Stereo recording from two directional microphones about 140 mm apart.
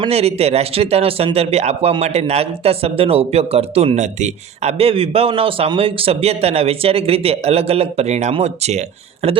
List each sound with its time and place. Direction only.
0.1 s speech: 45° right (ahead or behind)